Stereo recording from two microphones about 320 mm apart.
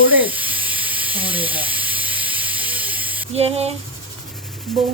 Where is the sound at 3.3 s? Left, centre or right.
Centre.